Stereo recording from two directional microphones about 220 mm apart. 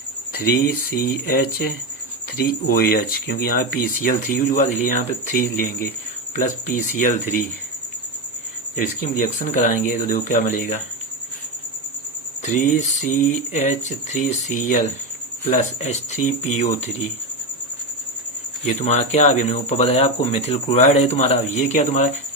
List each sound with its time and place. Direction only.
0.3 s speech: 45° left (ahead or behind)
9.1 s speech: 35° left (ahead or behind)
12.5 s speech: 35° left (ahead or behind)
18.6 s speech: 30° left (ahead or behind)